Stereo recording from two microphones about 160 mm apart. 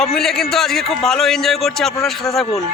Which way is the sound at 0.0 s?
Centre (ahead or behind).